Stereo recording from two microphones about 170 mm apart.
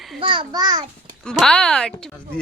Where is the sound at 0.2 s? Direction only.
30° right (ahead or behind).